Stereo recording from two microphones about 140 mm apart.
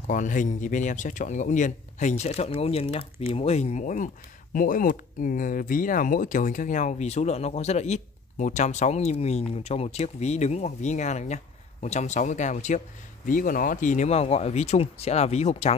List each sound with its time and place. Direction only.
0.1 s speech: 65° left (ahead or behind)
4.6 s speech: 80° left; by 12.8 s 60° left (ahead or behind)
13.3 s speech: 75° left (ahead or behind); by 15.7 s 50° left (ahead or behind)